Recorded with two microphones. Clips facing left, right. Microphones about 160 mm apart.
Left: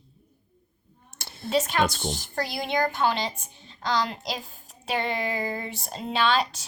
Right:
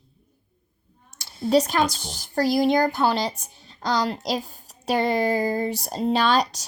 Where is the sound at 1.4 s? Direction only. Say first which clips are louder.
Right 5 dB; 40° right (ahead or behind).